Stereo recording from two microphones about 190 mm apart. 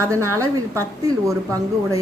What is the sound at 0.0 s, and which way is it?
Speech, 15° right (ahead or behind).